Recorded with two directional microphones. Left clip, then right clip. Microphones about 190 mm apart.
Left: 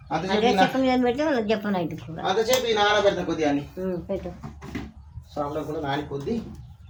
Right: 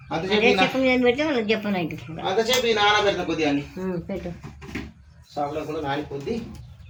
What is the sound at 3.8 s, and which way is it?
Speech, 40° right (ahead or behind).